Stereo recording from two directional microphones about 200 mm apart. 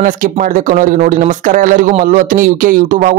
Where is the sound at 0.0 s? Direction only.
40° right (ahead or behind).